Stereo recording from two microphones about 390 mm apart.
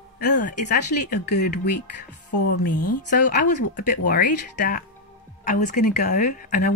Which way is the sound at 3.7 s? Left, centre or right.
Centre.